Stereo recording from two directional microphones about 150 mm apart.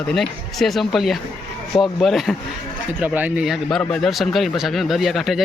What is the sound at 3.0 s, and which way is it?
Speech, 10° right (ahead or behind).